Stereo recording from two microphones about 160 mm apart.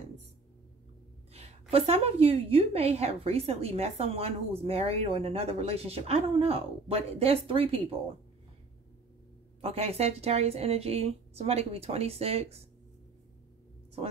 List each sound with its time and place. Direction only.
1.3 s a woman's voice: 40° right (ahead or behind)
9.6 s a woman's voice: 40° right (ahead or behind)